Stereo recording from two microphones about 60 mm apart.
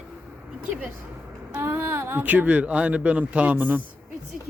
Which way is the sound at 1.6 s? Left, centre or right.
Right.